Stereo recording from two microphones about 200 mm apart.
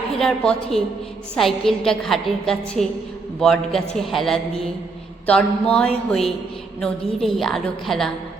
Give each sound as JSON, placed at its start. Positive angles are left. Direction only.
{"t": 0.2, "sound": "a woman's voice", "side_deg": 5}